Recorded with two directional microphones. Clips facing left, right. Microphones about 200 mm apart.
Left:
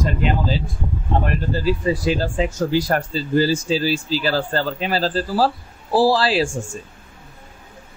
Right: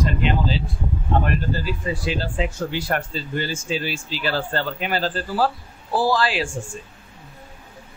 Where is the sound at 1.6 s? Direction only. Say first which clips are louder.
Left 7 dB; 35° left (ahead or behind).